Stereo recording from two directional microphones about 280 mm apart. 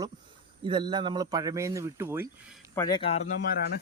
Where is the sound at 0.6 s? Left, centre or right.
Centre.